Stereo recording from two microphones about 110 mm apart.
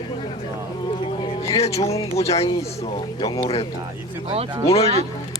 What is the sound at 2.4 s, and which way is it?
Speech, 35° left (ahead or behind).